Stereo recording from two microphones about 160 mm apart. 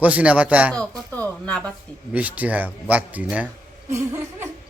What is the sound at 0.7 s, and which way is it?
Speech, 10° left (ahead or behind).